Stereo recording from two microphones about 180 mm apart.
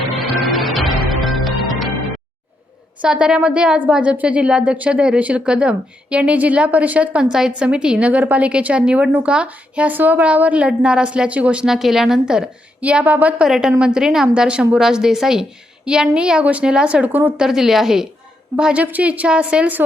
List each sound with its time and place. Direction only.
0.5 s music: centre (ahead or behind)
3.0 s a woman's voice: 5° right (ahead or behind)